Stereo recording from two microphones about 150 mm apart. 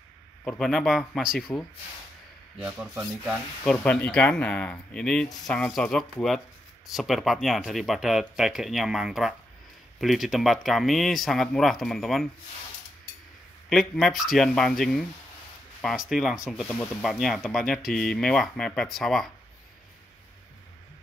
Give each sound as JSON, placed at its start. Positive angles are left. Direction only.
{"t": 0.5, "sound": "speech", "side_deg": 5}
{"t": 3.6, "sound": "speech", "side_deg": 5}
{"t": 13.7, "sound": "speech", "side_deg": 0}